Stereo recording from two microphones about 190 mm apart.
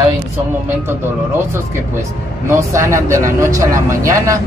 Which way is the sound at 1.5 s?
15° right (ahead or behind).